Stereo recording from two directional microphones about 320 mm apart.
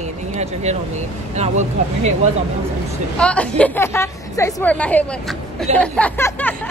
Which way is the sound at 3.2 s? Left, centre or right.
Centre.